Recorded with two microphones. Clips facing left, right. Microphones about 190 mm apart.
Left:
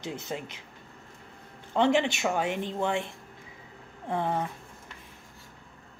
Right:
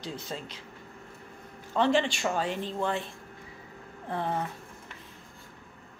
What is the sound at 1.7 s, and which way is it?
Speech, 20° left (ahead or behind).